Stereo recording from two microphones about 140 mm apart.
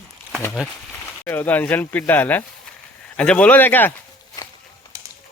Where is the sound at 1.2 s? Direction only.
15° left (ahead or behind).